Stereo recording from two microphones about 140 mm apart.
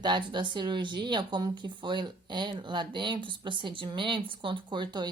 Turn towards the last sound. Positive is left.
turn(degrees=-30)  # may be behind; listen again after turning